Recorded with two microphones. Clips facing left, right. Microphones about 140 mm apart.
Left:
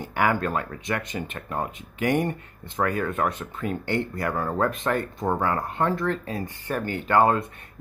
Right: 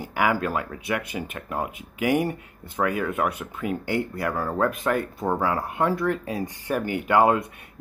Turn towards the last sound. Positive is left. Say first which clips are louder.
# right 1 dB
turn(degrees=-10)  # may be behind; listen again after turning